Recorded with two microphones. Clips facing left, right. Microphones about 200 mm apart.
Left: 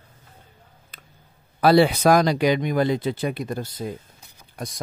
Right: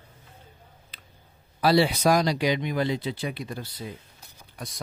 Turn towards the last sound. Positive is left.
turn(degrees=45)  # may be behind; listen again after turning